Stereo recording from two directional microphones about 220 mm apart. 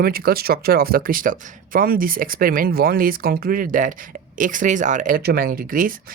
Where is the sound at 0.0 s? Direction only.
40° right (ahead or behind).